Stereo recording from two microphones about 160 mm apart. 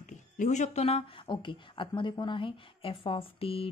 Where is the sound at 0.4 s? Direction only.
45° left (ahead or behind).